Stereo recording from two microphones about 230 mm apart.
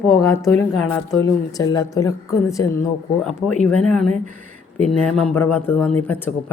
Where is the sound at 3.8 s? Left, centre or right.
Centre.